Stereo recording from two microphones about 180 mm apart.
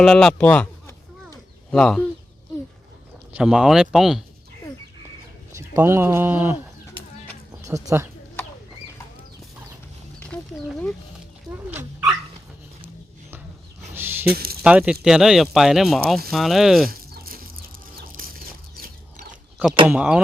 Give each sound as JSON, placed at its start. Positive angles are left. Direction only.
{"t": 0.0, "sound": "speech", "side_deg": 5}
{"t": 3.3, "sound": "speech", "side_deg": -5}
{"t": 5.5, "sound": "speech", "side_deg": -15}
{"t": 7.6, "sound": "speech", "side_deg": -15}
{"t": 10.2, "sound": "a sound", "side_deg": 5}
{"t": 11.7, "sound": "dog", "side_deg": -10}
{"t": 13.9, "sound": "a sound", "side_deg": -10}
{"t": 14.3, "sound": "speech", "side_deg": -60}
{"t": 14.6, "sound": "speech", "side_deg": -5}
{"t": 16.9, "sound": "a sound", "side_deg": -55}
{"t": 18.8, "sound": "a sound", "side_deg": -45}
{"t": 19.9, "sound": "speech", "side_deg": -5}